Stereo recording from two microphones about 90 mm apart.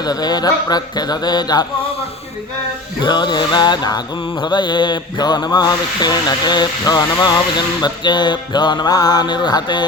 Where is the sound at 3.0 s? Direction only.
55° left (ahead or behind).